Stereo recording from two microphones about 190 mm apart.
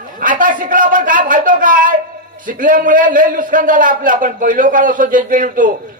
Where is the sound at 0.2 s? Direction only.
45° right (ahead or behind).